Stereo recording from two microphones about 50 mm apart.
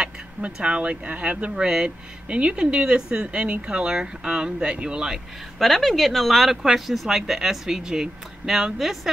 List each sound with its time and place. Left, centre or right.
0.0 s speech: right
1.5 s speech: centre
5.6 s speech: centre